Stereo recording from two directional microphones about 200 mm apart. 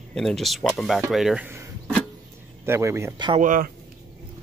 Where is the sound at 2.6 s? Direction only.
15° right (ahead or behind).